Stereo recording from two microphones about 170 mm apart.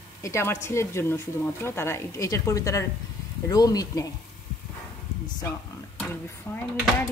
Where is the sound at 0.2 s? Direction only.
15° left (ahead or behind).